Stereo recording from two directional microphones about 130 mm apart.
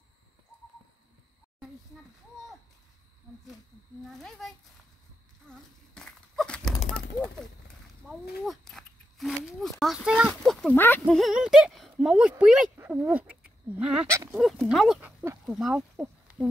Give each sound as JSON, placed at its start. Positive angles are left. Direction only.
{"t": 4.0, "sound": "speech", "side_deg": 0}
{"t": 5.5, "sound": "a sound", "side_deg": 5}
{"t": 8.1, "sound": "speech", "side_deg": 0}
{"t": 10.7, "sound": "speech", "side_deg": 15}
{"t": 11.1, "sound": "speech", "side_deg": 0}
{"t": 15.0, "sound": "a sound", "side_deg": -10}
{"t": 15.4, "sound": "speech", "side_deg": -5}